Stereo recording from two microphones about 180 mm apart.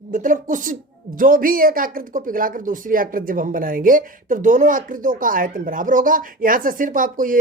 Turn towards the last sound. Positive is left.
turn(degrees=-50)  # may be behind; listen again after turning